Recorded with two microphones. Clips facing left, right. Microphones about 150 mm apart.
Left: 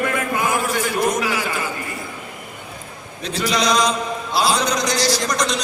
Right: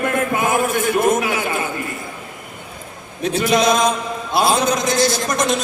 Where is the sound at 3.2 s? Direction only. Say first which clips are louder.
Right 5 dB; 55° right (ahead or behind).